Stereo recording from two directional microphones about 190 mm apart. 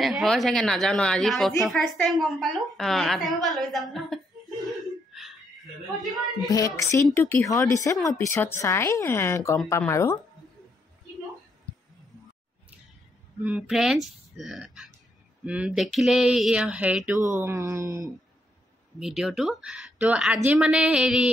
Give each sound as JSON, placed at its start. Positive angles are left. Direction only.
{"t": 0.0, "sound": "a woman's voice", "side_deg": 0}
{"t": 4.6, "sound": "laughter", "side_deg": 0}
{"t": 6.4, "sound": "speech", "side_deg": 15}
{"t": 13.4, "sound": "a woman's voice", "side_deg": -5}
{"t": 18.9, "sound": "a woman's voice", "side_deg": 0}